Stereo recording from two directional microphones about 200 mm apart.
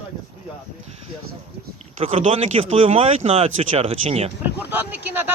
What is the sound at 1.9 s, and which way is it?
Speech, 30° right (ahead or behind).